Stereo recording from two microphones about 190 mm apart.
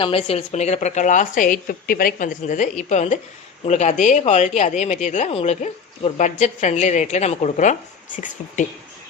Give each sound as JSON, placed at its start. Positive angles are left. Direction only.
{"t": 0.0, "sound": "speech", "side_deg": 30}